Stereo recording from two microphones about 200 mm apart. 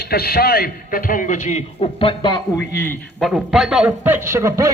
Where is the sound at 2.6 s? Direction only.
10° left (ahead or behind).